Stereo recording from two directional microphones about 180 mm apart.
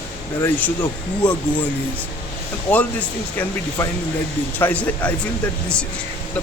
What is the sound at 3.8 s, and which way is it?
Speech, 20° left (ahead or behind).